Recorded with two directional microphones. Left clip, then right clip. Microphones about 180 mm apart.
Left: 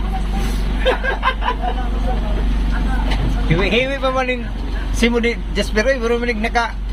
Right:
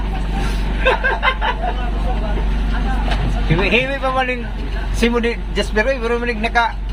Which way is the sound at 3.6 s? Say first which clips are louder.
Right 1 dB; centre (ahead or behind).